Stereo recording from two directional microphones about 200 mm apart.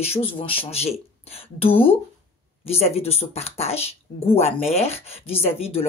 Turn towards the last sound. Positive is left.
turn(degrees=30)  # may be behind; listen again after turning